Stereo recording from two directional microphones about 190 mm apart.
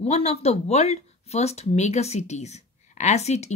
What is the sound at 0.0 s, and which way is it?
Speech, 35° left (ahead or behind).